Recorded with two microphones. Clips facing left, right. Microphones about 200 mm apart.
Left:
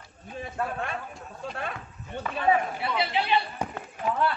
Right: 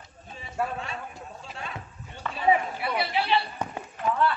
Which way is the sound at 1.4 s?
55° left (ahead or behind).